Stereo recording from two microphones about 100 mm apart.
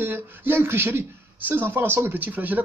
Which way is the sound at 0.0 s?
20° right (ahead or behind).